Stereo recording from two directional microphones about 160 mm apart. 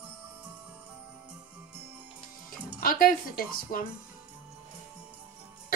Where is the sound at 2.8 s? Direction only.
60° left (ahead or behind).